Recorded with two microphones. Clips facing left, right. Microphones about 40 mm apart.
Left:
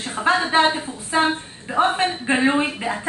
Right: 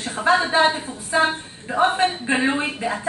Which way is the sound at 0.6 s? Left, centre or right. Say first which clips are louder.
Even; centre.